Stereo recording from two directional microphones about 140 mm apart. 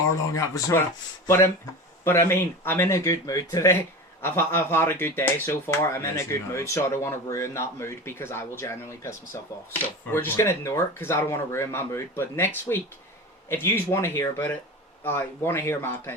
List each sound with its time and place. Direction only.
0.3 s speech: 25° left (ahead or behind)
2.0 s speech: 15° left (ahead or behind)